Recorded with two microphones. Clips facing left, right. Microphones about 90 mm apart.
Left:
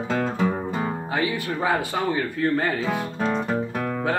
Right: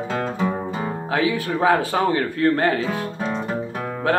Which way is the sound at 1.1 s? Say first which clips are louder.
Right 5 dB; 85° right.